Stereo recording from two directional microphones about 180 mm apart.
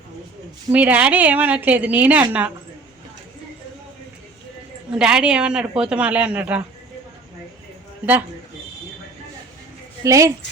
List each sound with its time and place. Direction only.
0.7 s a woman's voice: 10° right (ahead or behind)
4.9 s a woman's voice: 5° right (ahead or behind)
10.0 s a woman's voice: 20° right (ahead or behind)